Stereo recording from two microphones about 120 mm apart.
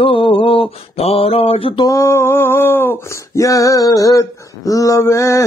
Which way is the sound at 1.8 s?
25° left (ahead or behind).